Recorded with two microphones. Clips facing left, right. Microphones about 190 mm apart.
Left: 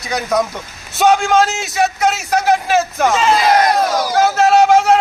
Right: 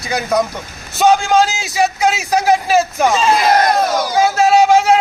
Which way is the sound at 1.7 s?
10° right (ahead or behind).